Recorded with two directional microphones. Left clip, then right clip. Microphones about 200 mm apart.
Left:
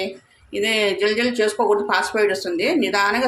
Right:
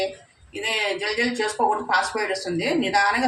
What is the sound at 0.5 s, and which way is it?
A woman's voice, 50° left (ahead or behind).